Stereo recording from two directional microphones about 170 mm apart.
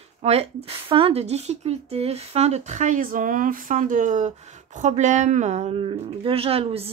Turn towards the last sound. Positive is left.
turn(degrees=-35)  # may be behind; listen again after turning